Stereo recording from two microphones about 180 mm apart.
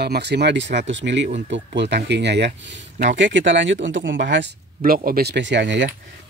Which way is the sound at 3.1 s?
90° right.